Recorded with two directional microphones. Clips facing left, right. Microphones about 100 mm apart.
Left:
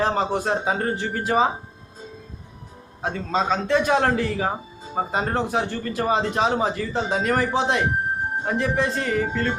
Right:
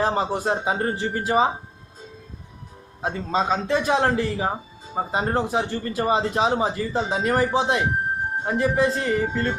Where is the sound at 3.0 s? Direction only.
10° right (ahead or behind).